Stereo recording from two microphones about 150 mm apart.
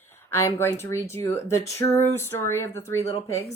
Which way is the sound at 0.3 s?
15° left (ahead or behind).